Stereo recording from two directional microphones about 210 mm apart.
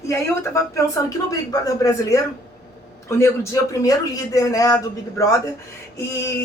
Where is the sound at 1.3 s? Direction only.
15° left (ahead or behind).